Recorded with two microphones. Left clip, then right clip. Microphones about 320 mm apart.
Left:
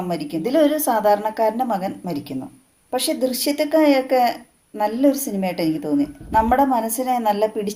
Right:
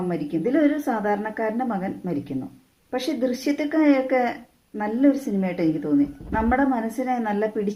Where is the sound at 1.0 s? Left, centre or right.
Left.